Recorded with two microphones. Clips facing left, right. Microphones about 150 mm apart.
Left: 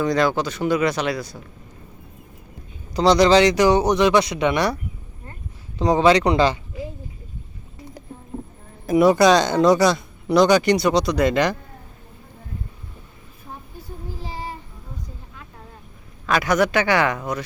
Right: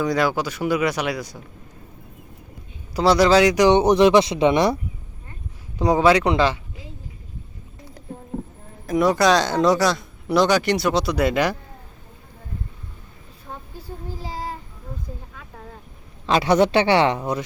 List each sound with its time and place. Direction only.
0.0 s speech: 10° right (ahead or behind)
2.9 s speech: 5° right (ahead or behind); by 4.8 s 25° right (ahead or behind)
5.8 s speech: 5° right (ahead or behind)
8.9 s speech: 5° left (ahead or behind)
16.2 s speech: 30° right (ahead or behind)